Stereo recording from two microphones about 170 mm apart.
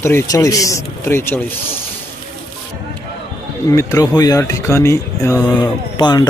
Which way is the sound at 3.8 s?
20° left (ahead or behind).